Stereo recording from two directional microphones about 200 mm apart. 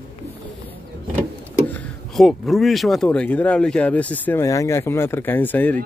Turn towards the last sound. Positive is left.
turn(degrees=10)  # may be behind; listen again after turning